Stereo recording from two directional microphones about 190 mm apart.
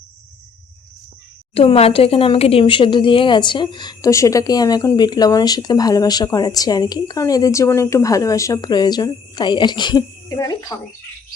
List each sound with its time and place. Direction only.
1.5 s speech: 30° left (ahead or behind)